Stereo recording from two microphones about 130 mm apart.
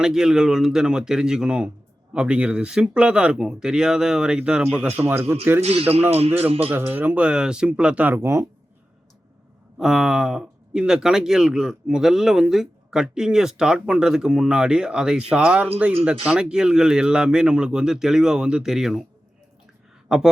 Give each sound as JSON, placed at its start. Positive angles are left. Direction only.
{"t": 0.0, "sound": "speech", "side_deg": -5}
{"t": 5.6, "sound": "speech", "side_deg": -50}
{"t": 6.7, "sound": "speech", "side_deg": -15}
{"t": 9.7, "sound": "speech", "side_deg": -5}
{"t": 20.1, "sound": "speech", "side_deg": -5}